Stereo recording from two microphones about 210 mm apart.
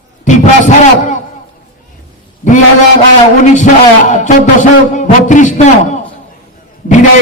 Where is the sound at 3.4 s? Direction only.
35° left (ahead or behind).